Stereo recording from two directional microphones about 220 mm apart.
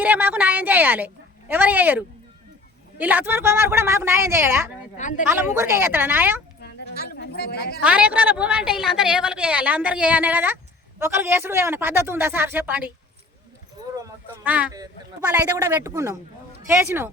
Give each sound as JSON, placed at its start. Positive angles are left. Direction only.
{"t": 0.0, "sound": "a woman's voice", "side_deg": -10}
{"t": 4.9, "sound": "a woman's voice", "side_deg": 35}
{"t": 5.5, "sound": "speech", "side_deg": -10}
{"t": 6.6, "sound": "sheep", "side_deg": 45}
{"t": 7.8, "sound": "a woman's voice", "side_deg": -5}
{"t": 13.9, "sound": "speech", "side_deg": -10}